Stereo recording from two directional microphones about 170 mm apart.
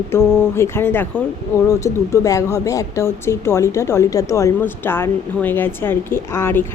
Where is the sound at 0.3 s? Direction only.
15° left (ahead or behind).